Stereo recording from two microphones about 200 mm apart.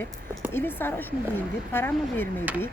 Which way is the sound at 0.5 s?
10° left (ahead or behind).